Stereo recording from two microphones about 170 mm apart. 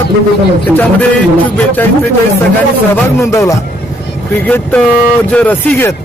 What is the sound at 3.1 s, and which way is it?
Speech, 15° left (ahead or behind).